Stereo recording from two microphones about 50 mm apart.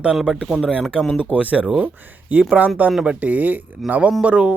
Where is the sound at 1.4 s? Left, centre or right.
Right.